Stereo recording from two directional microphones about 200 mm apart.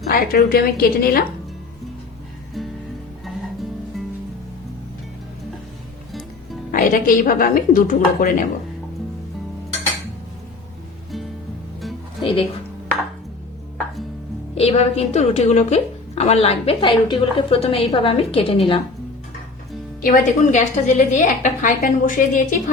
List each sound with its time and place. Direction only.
0.1 s a woman's voice: 45° left (ahead or behind)
2.6 s music: centre (ahead or behind)
6.7 s a woman's voice: 45° left (ahead or behind)
12.2 s speech: 25° left (ahead or behind)
14.5 s a woman's voice: 30° left (ahead or behind)
20.0 s a woman's voice: 45° left (ahead or behind)